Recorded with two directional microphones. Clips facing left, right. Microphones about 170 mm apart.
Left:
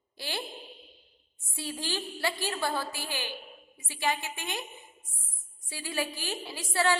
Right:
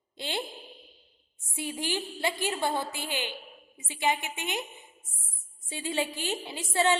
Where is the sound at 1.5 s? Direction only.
20° right (ahead or behind).